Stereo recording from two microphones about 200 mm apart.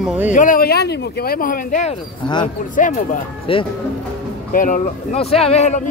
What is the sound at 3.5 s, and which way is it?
Speech, 25° left (ahead or behind).